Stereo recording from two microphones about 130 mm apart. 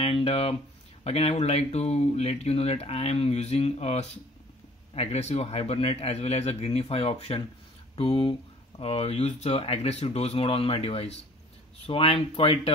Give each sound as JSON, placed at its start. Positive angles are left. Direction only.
{"t": 0.0, "sound": "speech", "side_deg": 50}